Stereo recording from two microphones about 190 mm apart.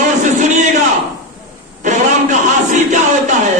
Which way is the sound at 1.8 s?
40° right (ahead or behind).